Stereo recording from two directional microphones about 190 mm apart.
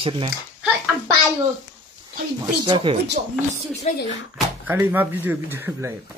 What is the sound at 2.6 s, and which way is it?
Speech, 25° right (ahead or behind).